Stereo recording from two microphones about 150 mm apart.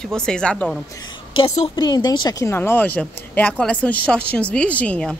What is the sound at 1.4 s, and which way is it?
Speech, 30° left (ahead or behind).